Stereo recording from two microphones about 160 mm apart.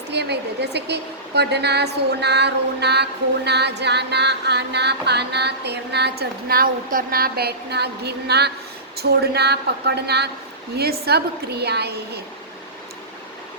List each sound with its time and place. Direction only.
0.1 s a woman's voice: 90° right